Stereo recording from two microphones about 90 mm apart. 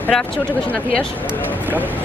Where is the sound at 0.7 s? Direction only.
10° left (ahead or behind).